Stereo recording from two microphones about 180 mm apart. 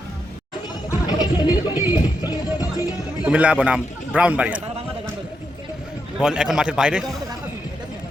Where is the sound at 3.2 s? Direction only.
5° right (ahead or behind).